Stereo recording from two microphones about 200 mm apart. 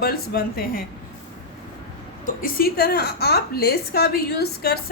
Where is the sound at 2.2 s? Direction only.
45° left (ahead or behind).